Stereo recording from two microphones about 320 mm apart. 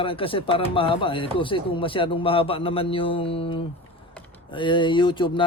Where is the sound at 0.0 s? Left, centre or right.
Centre.